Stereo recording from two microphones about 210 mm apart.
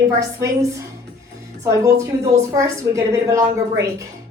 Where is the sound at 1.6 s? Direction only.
15° right (ahead or behind).